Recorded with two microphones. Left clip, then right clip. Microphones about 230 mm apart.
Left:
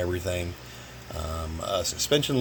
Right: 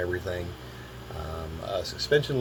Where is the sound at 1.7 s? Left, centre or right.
Left.